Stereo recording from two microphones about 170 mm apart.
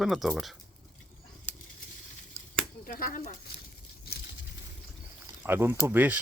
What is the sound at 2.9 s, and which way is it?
Speech, 60° left (ahead or behind).